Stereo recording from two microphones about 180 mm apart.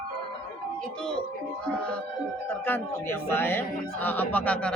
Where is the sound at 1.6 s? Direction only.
5° left (ahead or behind).